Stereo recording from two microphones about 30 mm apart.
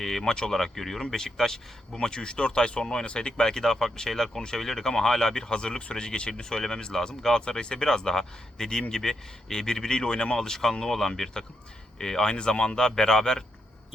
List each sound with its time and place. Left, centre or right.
0.0 s speech: centre; by 3.5 s left
3.5 s speech: centre
5.3 s speech: left
7.9 s speech: centre
12.3 s speech: left